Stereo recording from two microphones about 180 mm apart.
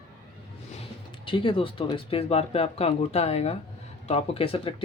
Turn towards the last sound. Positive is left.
turn(degrees=30)  # may be behind; listen again after turning